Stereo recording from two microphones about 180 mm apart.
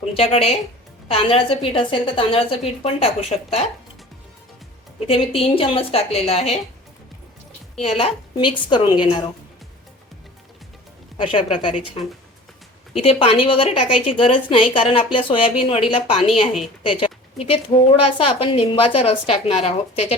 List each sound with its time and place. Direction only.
0.1 s a woman's voice: 35° left (ahead or behind)
5.0 s a woman's voice: 30° left (ahead or behind)
7.8 s a woman's voice: 30° left (ahead or behind)
11.2 s a woman's voice: 30° left (ahead or behind)
13.0 s a woman's voice: 30° left (ahead or behind)